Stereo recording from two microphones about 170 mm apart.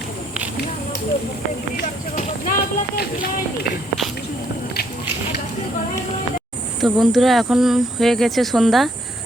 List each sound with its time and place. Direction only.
2.1 s speech: 60° left (ahead or behind)
6.8 s speech: centre (ahead or behind)